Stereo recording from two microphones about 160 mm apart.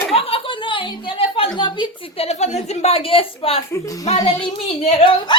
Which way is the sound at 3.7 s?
20° left (ahead or behind).